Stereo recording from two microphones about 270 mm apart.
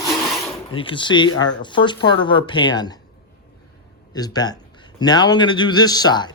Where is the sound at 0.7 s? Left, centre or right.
Centre.